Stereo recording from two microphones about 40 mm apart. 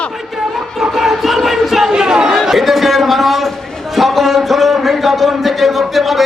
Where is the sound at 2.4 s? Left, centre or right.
Centre.